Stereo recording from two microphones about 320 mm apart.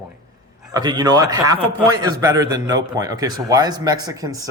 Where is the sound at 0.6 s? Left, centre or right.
Centre.